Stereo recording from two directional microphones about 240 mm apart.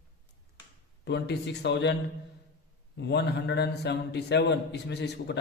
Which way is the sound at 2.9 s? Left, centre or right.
Left.